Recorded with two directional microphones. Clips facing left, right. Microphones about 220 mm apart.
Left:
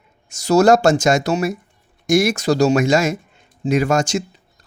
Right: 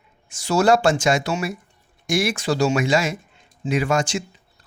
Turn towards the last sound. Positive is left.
turn(degrees=40)  # may be behind; listen again after turning